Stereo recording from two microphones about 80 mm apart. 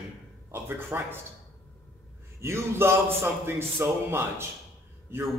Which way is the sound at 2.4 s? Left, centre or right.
Right.